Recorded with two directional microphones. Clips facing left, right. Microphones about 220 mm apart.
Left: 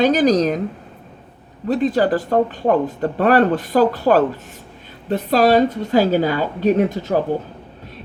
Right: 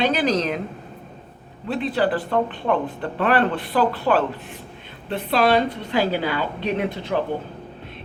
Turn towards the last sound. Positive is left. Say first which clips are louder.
# left 7 dB
turn(degrees=40)  # may be behind; listen again after turning